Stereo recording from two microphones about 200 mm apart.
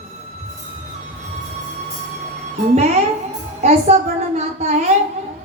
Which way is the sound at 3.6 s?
35° right (ahead or behind).